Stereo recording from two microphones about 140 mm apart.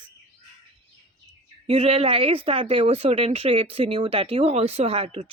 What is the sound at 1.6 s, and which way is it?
A woman's voice, 45° right (ahead or behind).